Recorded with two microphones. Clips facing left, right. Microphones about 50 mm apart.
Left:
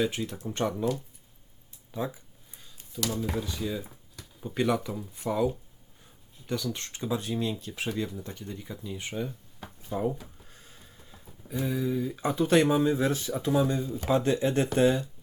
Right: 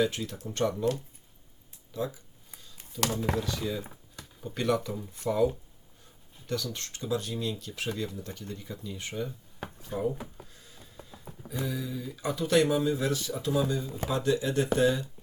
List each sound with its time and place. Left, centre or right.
0.0 s speech: left
3.4 s speech: centre
6.5 s speech: centre
10.5 s a sound: left
11.4 s speech: left